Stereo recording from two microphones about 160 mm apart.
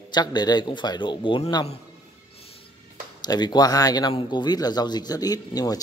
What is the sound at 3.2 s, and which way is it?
Speech, 25° left (ahead or behind).